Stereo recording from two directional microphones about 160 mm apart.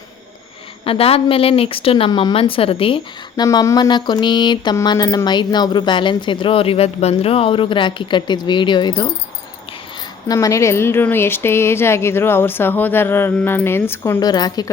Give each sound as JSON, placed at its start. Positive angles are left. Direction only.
{"t": 0.9, "sound": "speech", "side_deg": 35}
{"t": 10.2, "sound": "speech", "side_deg": 20}